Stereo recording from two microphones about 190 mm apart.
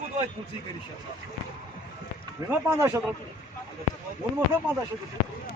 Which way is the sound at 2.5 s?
15° right (ahead or behind).